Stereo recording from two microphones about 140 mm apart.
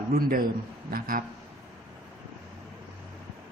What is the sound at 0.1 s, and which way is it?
Speech, 90° right.